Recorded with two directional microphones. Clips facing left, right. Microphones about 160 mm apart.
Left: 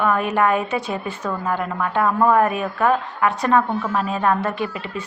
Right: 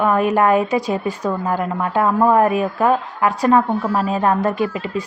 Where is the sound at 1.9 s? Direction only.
15° right (ahead or behind).